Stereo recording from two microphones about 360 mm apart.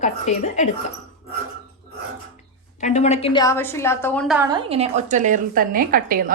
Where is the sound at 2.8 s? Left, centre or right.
Centre.